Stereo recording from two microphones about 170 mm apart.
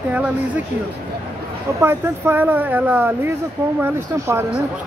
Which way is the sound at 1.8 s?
15° right (ahead or behind).